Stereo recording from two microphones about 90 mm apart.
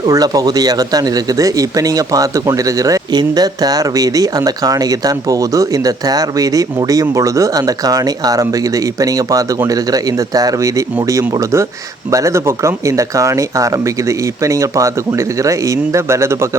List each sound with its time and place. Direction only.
0.1 s speech: 45° right (ahead or behind)
3.1 s speech: 50° right (ahead or behind); by 16.5 s 30° right (ahead or behind)